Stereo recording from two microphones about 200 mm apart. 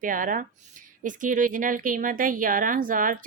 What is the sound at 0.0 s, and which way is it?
A woman's voice, 40° right (ahead or behind).